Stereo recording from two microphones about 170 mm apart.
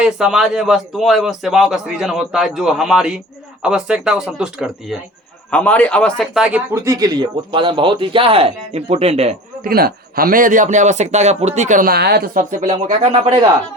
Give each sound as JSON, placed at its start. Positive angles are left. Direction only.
{"t": 0.0, "sound": "a man's voice", "side_deg": -5}
{"t": 5.5, "sound": "a man's voice", "side_deg": 10}
{"t": 6.7, "sound": "speech", "side_deg": -20}
{"t": 9.6, "sound": "a man's voice", "side_deg": -60}